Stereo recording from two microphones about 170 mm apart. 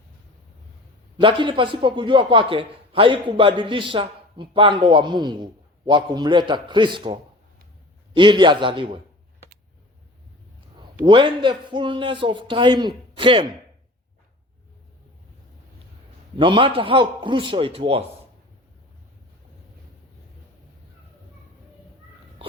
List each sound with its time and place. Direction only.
1.2 s a man's voice: 30° right (ahead or behind)
11.0 s a man's voice: 30° right (ahead or behind)
16.4 s a man's voice: 30° right (ahead or behind)